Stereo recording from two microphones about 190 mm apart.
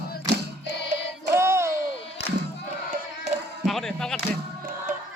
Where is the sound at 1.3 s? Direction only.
15° right (ahead or behind).